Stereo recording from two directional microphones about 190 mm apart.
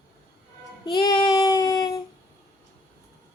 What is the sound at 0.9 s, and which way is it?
Child singing, 25° left (ahead or behind).